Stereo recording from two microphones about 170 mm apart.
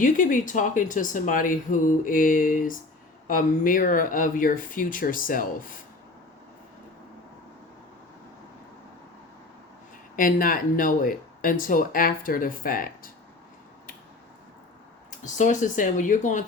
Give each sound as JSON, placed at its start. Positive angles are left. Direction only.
{"t": 0.0, "sound": "speech", "side_deg": 50}
{"t": 10.2, "sound": "speech", "side_deg": 55}
{"t": 15.2, "sound": "speech", "side_deg": 45}